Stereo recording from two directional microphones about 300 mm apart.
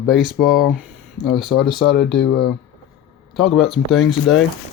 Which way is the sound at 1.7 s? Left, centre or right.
Left.